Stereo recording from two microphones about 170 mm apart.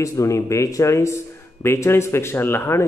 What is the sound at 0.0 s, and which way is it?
Speech, 20° left (ahead or behind).